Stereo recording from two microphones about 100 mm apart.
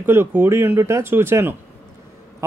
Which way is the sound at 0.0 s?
25° right (ahead or behind).